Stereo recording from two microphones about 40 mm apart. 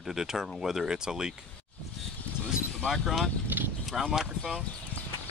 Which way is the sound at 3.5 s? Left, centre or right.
Right.